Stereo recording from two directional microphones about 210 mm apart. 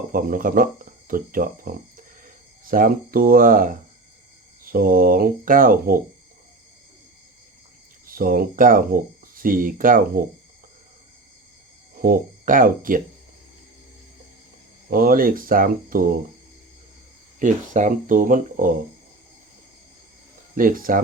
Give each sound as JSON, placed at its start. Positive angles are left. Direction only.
{"t": 0.1, "sound": "speech", "side_deg": -40}
{"t": 8.0, "sound": "speech", "side_deg": -40}
{"t": 12.0, "sound": "speech", "side_deg": -40}
{"t": 14.8, "sound": "speech", "side_deg": -45}
{"t": 17.4, "sound": "speech", "side_deg": -35}
{"t": 20.6, "sound": "speech", "side_deg": -40}